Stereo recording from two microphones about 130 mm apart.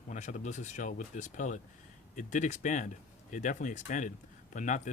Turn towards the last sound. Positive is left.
turn(degrees=70)  # may be behind; listen again after turning